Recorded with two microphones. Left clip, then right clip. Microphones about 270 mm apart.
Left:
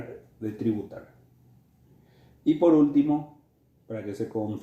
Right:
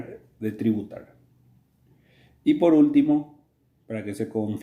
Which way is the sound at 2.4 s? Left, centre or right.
Right.